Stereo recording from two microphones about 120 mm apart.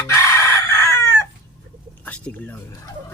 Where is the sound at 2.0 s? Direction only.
10° left (ahead or behind).